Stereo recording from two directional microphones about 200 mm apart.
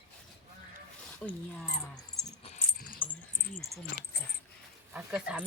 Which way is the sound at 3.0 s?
10° left (ahead or behind).